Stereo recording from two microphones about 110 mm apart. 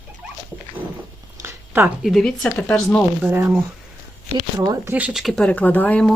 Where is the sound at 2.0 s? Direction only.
Centre (ahead or behind).